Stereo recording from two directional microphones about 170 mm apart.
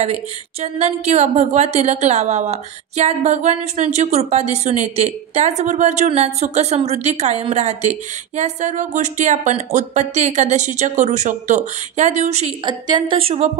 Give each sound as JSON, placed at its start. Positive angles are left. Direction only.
{"t": 0.0, "sound": "a woman's voice", "side_deg": -40}
{"t": 12.6, "sound": "a woman's voice", "side_deg": -25}